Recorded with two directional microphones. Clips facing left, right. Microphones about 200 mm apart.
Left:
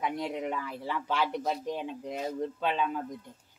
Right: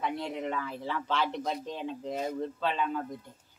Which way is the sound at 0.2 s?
10° left (ahead or behind).